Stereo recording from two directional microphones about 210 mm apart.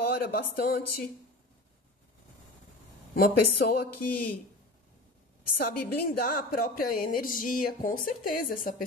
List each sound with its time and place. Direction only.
0.1 s speech: 45° left (ahead or behind)
3.2 s speech: 45° left (ahead or behind)
5.7 s speech: 45° left (ahead or behind)